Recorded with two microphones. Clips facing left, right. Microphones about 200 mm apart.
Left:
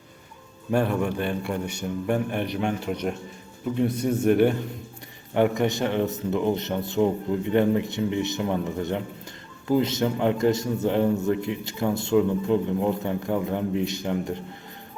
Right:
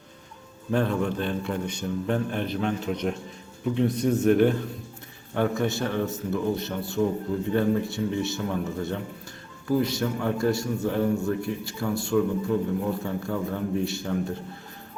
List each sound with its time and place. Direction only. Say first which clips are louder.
0.7 s a man's voice: left 1 dB; 10° left (ahead or behind)